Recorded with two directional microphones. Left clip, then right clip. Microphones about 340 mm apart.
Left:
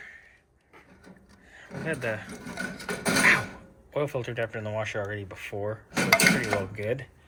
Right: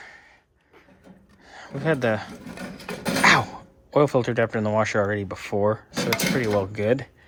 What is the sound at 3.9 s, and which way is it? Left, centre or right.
Speech, right.